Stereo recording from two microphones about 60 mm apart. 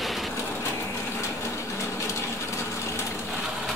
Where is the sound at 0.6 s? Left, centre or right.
Left.